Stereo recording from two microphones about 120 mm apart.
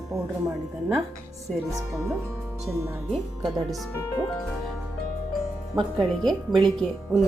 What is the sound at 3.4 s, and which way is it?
Speech, 35° right (ahead or behind).